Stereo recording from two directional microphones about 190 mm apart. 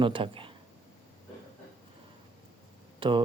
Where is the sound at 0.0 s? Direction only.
25° right (ahead or behind).